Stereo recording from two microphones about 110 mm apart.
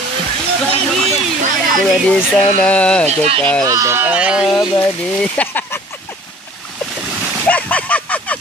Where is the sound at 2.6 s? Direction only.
10° left (ahead or behind).